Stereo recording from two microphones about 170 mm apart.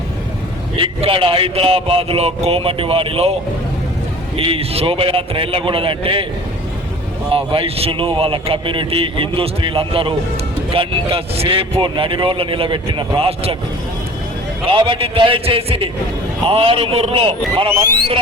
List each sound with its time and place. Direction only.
0.8 s speech: 30° right (ahead or behind)
4.4 s speech: 35° right (ahead or behind)
7.3 s speech: 35° right (ahead or behind)
14.7 s speech: 30° right (ahead or behind)